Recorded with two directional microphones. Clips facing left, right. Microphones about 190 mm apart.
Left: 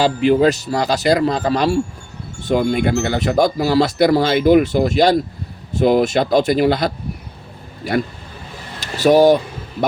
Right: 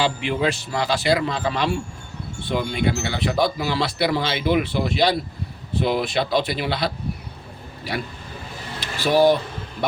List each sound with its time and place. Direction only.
0.0 s speech: 40° left (ahead or behind)
8.8 s speech: 45° left (ahead or behind)